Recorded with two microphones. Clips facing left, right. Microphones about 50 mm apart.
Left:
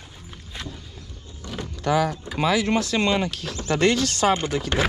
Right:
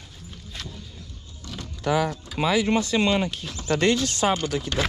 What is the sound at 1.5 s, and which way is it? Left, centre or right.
Vehicle, left.